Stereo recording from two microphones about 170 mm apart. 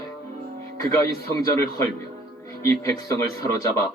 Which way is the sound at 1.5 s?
15° left (ahead or behind).